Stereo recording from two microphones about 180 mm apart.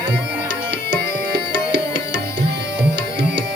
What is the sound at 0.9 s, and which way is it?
Tabla, 75° right (ahead or behind).